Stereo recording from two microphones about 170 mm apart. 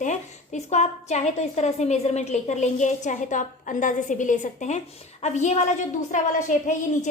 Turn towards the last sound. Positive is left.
turn(degrees=45)  # may be behind; listen again after turning